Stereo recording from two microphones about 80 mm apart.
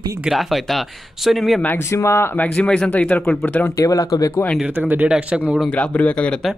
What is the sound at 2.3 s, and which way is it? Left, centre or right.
Speech, centre.